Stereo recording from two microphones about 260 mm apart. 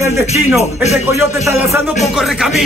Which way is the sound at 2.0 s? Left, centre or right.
Centre.